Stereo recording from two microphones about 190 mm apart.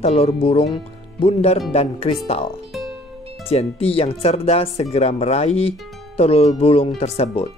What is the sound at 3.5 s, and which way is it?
Speech, 30° left (ahead or behind).